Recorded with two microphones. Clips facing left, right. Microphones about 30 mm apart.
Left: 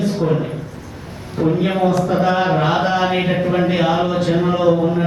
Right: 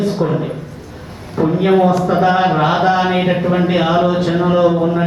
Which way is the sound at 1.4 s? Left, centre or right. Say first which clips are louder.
Right 5 dB; right.